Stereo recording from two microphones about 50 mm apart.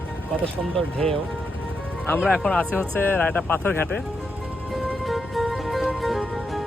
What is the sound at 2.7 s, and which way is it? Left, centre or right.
Speech, left.